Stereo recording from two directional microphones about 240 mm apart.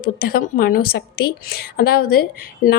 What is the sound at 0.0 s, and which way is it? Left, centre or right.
Speech, left.